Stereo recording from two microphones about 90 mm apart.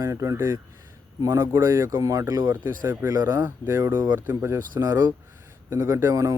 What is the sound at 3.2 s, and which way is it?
Speech, 25° right (ahead or behind).